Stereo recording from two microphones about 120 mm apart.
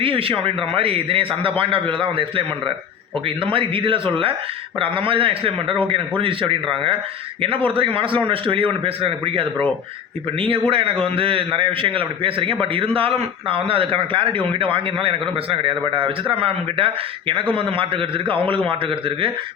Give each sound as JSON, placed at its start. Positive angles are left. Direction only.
{"t": 0.0, "sound": "a man's voice", "side_deg": -50}
{"t": 10.7, "sound": "a man's voice", "side_deg": -50}